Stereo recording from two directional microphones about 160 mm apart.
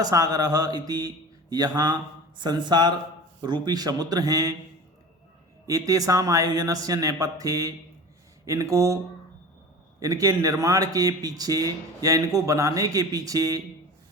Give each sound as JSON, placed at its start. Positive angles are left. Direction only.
{"t": 0.0, "sound": "a man's voice", "side_deg": -20}
{"t": 5.6, "sound": "a man's voice", "side_deg": -20}
{"t": 10.0, "sound": "a man's voice", "side_deg": -20}